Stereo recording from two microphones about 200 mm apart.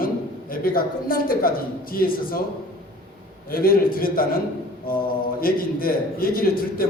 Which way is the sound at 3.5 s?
45° left (ahead or behind).